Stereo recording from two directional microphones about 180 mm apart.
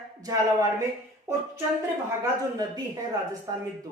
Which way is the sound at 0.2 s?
20° right (ahead or behind).